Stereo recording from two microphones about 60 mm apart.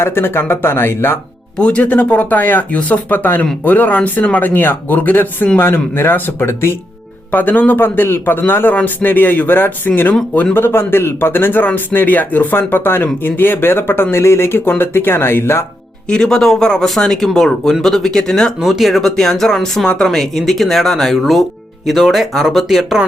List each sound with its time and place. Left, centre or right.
0.0 s a man's voice: left
1.5 s a man's voice: centre; by 6.7 s left
7.3 s a man's voice: left
16.0 s speech: centre
18.6 s speech: centre